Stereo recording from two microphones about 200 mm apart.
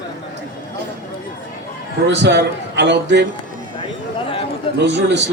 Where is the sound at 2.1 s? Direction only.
60° right (ahead or behind).